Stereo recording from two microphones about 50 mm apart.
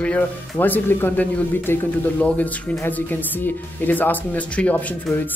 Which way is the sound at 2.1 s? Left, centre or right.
Left.